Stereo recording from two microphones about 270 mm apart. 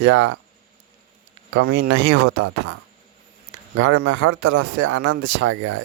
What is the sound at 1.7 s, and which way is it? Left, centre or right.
Speech, right.